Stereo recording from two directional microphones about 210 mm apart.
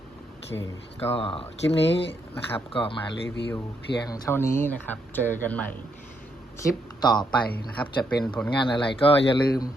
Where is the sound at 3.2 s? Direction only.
55° left (ahead or behind).